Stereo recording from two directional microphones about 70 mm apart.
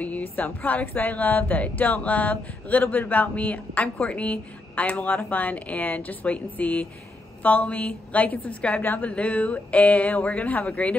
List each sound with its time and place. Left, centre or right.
0.0 s a woman's voice: left